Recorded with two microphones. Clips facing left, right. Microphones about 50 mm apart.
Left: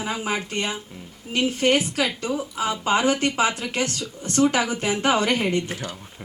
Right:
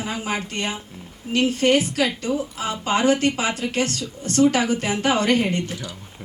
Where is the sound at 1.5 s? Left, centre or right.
Left.